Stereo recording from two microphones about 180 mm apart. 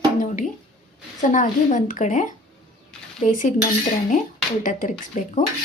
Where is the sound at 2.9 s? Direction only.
5° left (ahead or behind).